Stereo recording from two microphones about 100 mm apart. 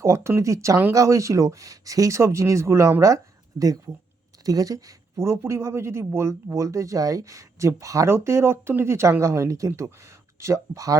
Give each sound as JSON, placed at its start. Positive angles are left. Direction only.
{"t": 0.0, "sound": "speech", "side_deg": -30}
{"t": 4.4, "sound": "speech", "side_deg": -35}